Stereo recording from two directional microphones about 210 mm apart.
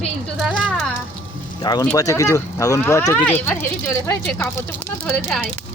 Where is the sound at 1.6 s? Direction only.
20° left (ahead or behind); by 5.4 s 5° left (ahead or behind).